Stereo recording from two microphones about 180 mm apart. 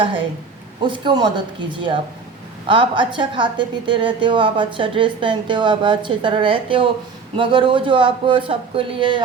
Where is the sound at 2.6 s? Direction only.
30° right (ahead or behind).